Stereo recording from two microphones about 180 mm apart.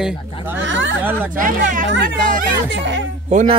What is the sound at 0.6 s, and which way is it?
Speech, 90° right.